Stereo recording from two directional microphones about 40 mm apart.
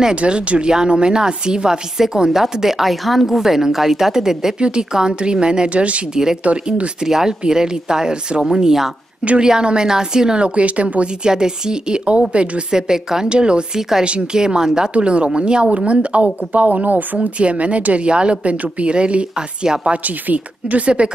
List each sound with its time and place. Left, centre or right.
0.1 s a woman's voice: right; by 4.6 s centre
4.6 s speech: right
5.7 s speech: right
7.0 s a woman's voice: centre; by 11.1 s right
11.2 s speech: centre
12.7 s a woman's voice: centre
13.7 s a woman's voice: centre
14.0 s speech: right
15.0 s speech: right
20.0 s speech: right